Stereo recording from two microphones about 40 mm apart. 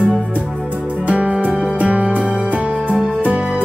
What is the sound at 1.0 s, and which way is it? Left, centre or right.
Music, right.